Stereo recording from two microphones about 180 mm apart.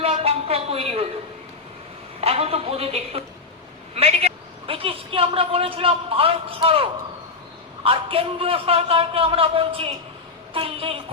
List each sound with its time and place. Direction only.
0.0 s a sound: 35° right (ahead or behind)
2.2 s a man's voice: 35° right (ahead or behind)
7.9 s a man's voice: 30° right (ahead or behind)